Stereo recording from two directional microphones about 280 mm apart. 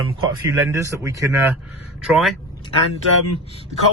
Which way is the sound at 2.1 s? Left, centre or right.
Centre.